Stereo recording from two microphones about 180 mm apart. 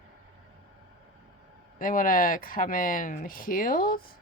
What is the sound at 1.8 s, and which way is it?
Speech, 50° left (ahead or behind).